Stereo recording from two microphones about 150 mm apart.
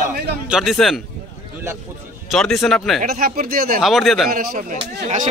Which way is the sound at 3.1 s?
70° right (ahead or behind).